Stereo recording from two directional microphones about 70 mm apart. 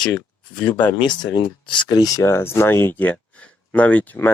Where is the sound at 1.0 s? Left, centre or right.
Left.